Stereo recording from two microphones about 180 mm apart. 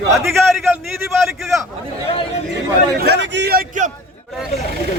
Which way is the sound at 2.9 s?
70° right (ahead or behind).